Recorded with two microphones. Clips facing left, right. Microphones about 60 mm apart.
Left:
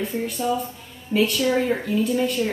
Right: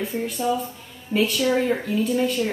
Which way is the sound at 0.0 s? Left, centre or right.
Centre.